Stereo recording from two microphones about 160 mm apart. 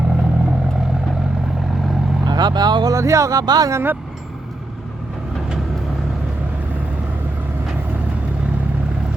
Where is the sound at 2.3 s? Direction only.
25° right (ahead or behind).